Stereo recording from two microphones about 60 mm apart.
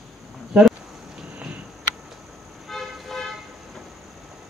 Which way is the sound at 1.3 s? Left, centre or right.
Right.